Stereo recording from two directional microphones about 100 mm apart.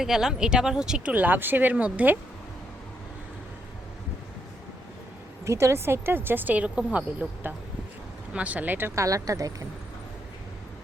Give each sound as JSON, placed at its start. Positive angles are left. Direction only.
{"t": 0.0, "sound": "speech", "side_deg": -5}
{"t": 5.5, "sound": "speech", "side_deg": -30}
{"t": 9.0, "sound": "speech", "side_deg": -35}